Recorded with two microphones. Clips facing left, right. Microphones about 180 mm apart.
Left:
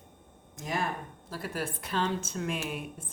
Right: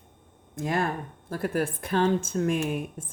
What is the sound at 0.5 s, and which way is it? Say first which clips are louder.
Speech: right 6 dB; 55° right (ahead or behind).